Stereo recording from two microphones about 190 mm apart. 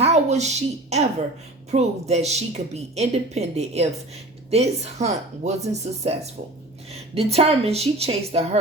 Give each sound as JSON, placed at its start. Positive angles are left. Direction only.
{"t": 0.0, "sound": "speech", "side_deg": -35}